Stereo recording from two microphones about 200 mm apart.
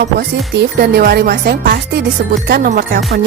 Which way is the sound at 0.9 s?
50° right (ahead or behind).